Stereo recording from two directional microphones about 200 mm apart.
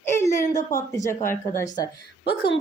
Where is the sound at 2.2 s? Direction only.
55° left (ahead or behind).